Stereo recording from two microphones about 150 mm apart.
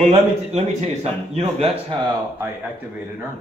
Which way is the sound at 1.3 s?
40° right (ahead or behind).